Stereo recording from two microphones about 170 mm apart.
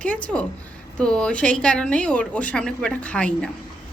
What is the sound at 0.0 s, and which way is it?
A woman's voice, 5° left (ahead or behind).